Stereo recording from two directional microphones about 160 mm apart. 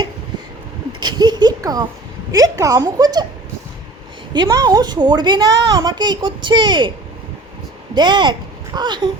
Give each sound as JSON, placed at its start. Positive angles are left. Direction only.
{"t": 0.9, "sound": "a sound", "side_deg": -25}
{"t": 2.3, "sound": "a woman's voice", "side_deg": -20}
{"t": 4.4, "sound": "a woman's voice", "side_deg": -25}
{"t": 7.9, "sound": "speech", "side_deg": -30}